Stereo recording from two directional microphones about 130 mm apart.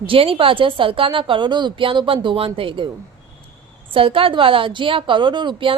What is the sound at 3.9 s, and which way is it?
Speech, 45° right (ahead or behind).